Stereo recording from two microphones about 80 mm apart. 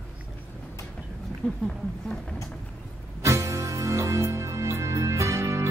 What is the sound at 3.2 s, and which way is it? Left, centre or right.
Music, right.